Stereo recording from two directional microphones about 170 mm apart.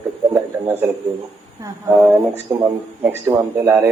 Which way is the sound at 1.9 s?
5° right (ahead or behind).